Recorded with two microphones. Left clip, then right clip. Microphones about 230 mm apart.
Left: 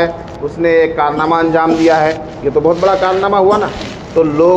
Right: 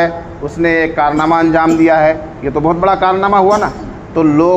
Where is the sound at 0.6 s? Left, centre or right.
Right.